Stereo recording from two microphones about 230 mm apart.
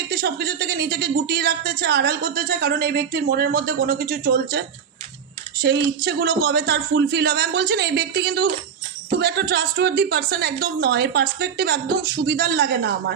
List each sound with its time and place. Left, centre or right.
0.1 s speech: right
5.6 s speech: right